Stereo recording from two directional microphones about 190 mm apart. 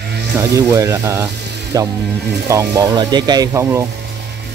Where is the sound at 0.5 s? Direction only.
15° right (ahead or behind).